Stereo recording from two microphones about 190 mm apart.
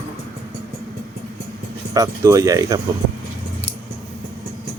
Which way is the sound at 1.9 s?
20° right (ahead or behind).